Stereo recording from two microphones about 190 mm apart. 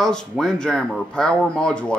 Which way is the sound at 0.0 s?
5° left (ahead or behind).